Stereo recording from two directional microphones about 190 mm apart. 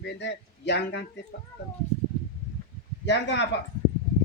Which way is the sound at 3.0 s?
65° left (ahead or behind).